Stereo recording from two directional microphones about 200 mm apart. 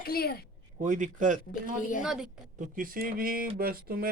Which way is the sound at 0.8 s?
40° right (ahead or behind).